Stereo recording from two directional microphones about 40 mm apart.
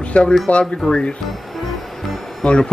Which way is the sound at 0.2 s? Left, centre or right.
Left.